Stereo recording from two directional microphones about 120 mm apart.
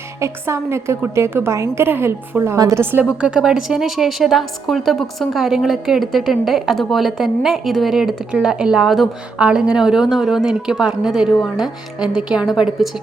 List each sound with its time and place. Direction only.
0.2 s a woman's voice: 25° right (ahead or behind); by 12.9 s centre (ahead or behind)